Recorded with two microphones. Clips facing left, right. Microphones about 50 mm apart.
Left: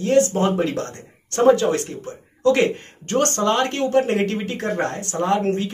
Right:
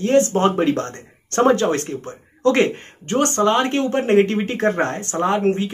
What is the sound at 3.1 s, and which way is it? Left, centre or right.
Speech, right.